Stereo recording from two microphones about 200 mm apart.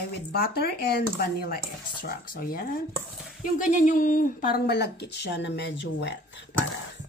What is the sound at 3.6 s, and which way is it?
A woman's voice, 40° left (ahead or behind).